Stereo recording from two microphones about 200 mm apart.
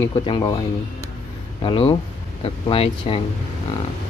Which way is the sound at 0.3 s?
20° left (ahead or behind).